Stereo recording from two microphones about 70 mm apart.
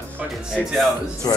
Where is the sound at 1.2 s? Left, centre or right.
Left.